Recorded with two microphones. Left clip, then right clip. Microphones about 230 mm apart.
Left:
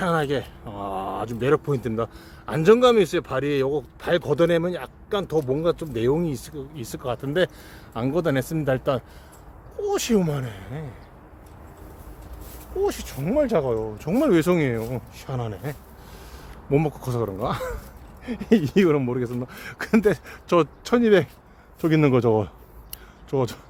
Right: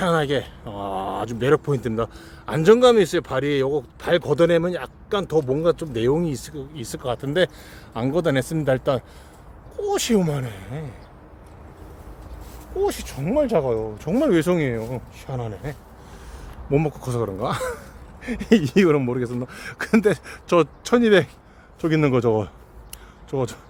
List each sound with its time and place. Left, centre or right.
0.0 s speech: centre
12.8 s speech: centre
21.8 s speech: left